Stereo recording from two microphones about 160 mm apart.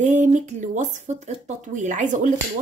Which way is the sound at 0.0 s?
50° right (ahead or behind).